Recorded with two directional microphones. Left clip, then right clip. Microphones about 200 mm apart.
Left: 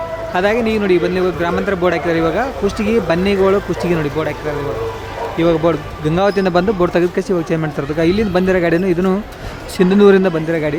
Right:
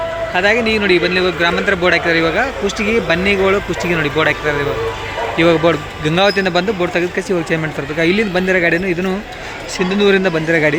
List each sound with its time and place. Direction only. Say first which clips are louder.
0.3 s a man's voice: right 1 dB; 20° left (ahead or behind)
10.3 s speech: right 4 dB; 5° left (ahead or behind)